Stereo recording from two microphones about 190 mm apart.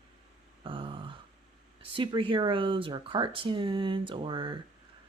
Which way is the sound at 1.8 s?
25° right (ahead or behind).